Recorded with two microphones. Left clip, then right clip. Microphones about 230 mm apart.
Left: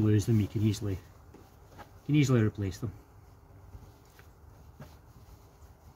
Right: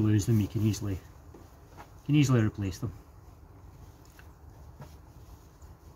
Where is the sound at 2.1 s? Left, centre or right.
Right.